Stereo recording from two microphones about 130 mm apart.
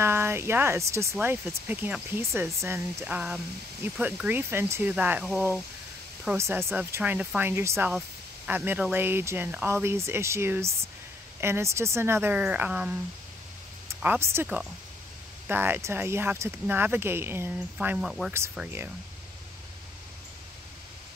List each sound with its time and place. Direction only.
0.0 s speech: 20° right (ahead or behind)
3.2 s speech: 10° right (ahead or behind)
6.3 s speech: 20° right (ahead or behind)
17.7 s speech: 5° right (ahead or behind)